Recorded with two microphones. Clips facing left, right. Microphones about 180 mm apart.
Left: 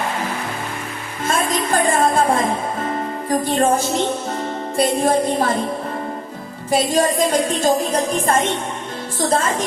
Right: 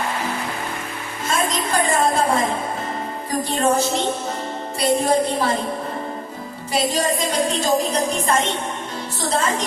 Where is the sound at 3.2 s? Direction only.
50° left (ahead or behind).